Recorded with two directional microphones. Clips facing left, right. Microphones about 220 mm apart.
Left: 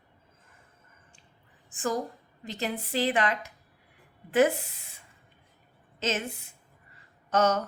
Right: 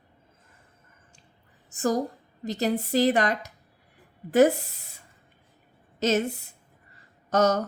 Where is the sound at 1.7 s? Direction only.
40° right (ahead or behind).